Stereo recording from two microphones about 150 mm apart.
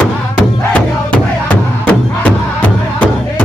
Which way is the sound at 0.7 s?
10° left (ahead or behind).